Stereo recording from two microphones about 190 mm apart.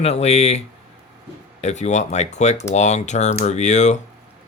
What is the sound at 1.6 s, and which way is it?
Speech, 35° left (ahead or behind).